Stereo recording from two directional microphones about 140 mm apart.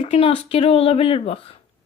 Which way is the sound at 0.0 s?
45° left (ahead or behind).